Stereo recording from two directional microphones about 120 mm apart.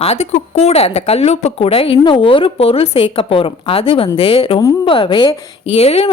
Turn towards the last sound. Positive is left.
turn(degrees=55)  # may be behind; listen again after turning